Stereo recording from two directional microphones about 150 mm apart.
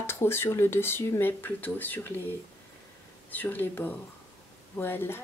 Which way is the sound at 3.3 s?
10° left (ahead or behind).